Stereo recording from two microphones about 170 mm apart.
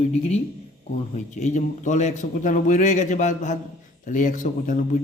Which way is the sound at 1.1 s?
45° left (ahead or behind).